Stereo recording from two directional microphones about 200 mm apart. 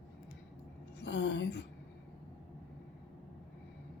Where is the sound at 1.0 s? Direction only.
60° left (ahead or behind).